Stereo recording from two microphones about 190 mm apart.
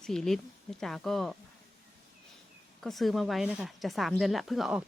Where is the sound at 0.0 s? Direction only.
5° left (ahead or behind).